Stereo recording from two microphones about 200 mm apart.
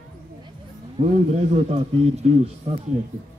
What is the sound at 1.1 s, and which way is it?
A man's voice, 35° right (ahead or behind).